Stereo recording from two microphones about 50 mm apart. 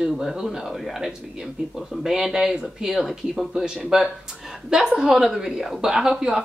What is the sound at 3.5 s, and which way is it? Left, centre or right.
Speech, centre.